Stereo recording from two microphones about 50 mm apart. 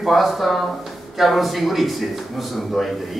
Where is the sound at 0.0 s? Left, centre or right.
Centre.